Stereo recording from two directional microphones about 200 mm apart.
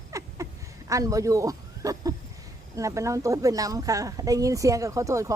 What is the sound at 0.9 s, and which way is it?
A woman's voice, 15° right (ahead or behind).